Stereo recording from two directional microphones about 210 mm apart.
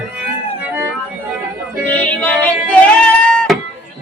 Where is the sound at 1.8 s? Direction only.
5° left (ahead or behind).